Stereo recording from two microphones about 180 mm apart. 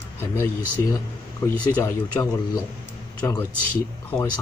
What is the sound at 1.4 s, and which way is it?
A man's voice, 15° left (ahead or behind).